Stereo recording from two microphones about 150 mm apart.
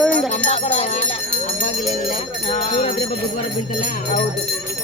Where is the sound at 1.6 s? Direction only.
65° left (ahead or behind).